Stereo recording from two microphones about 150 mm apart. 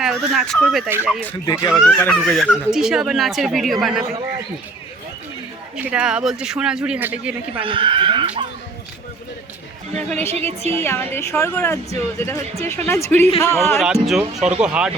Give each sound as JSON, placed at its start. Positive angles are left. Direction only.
{"t": 0.0, "sound": "speech", "side_deg": 0}
{"t": 0.9, "sound": "speech", "side_deg": -15}
{"t": 1.7, "sound": "speech", "side_deg": 5}
{"t": 5.7, "sound": "speech", "side_deg": -5}
{"t": 7.6, "sound": "speech", "side_deg": -35}
{"t": 10.1, "sound": "speech", "side_deg": 10}
{"t": 10.3, "sound": "a woman's voice", "side_deg": -45}
{"t": 10.8, "sound": "speech", "side_deg": 15}
{"t": 13.8, "sound": "speech", "side_deg": 0}